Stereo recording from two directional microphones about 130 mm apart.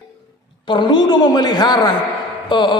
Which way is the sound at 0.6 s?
35° left (ahead or behind).